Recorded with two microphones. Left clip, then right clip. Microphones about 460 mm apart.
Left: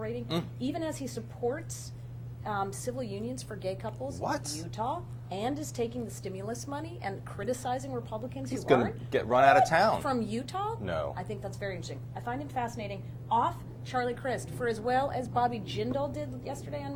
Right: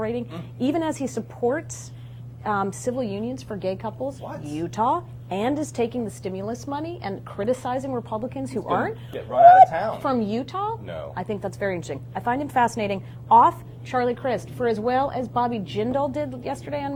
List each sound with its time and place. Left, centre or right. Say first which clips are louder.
0.6 s a woman's voice: right 10 dB; right
9.1 s speech: right 10 dB; left
10.0 s a woman's voice: right 7 dB; right
13.9 s a woman's voice: right 8 dB; right